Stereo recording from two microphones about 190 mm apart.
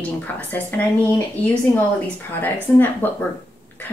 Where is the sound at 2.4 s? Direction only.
10° left (ahead or behind).